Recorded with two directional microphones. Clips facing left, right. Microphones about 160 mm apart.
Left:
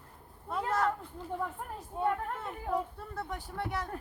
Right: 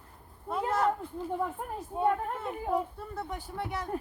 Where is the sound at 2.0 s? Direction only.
15° right (ahead or behind).